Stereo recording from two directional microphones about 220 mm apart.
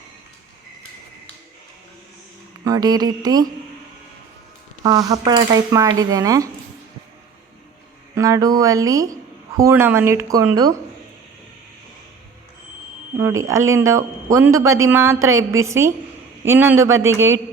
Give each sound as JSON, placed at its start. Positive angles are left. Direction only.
{"t": 2.6, "sound": "speech", "side_deg": -15}
{"t": 4.8, "sound": "speech", "side_deg": -15}
{"t": 8.1, "sound": "speech", "side_deg": -15}
{"t": 13.7, "sound": "speech", "side_deg": -15}